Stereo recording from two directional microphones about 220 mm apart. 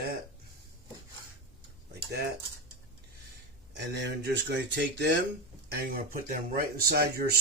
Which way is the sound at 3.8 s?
50° right (ahead or behind).